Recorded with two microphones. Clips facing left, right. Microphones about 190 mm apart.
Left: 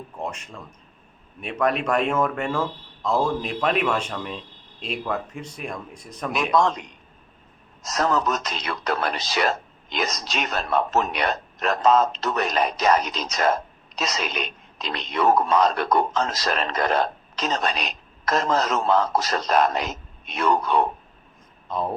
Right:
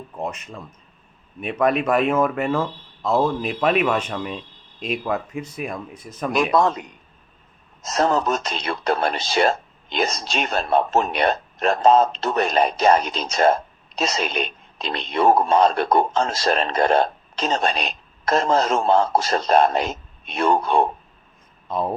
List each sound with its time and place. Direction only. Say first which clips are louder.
1.4 s speech: right 3 dB; 5° right (ahead or behind)
7.8 s a man's voice: right 3 dB; 25° right (ahead or behind)